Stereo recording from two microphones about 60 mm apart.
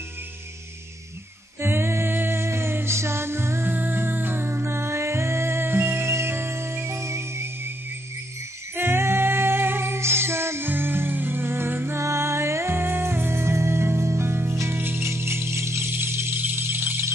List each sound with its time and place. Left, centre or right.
1.6 s music: right
8.7 s music: right
15.9 s music: right